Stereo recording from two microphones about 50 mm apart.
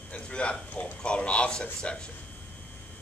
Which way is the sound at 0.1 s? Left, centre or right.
Left.